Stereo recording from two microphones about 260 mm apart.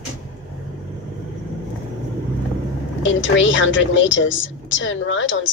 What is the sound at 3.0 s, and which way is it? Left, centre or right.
A woman's voice, left.